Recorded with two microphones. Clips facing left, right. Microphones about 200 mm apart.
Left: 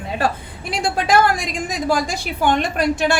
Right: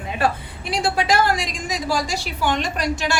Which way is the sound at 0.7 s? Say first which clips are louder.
Left 2 dB; 50° left (ahead or behind).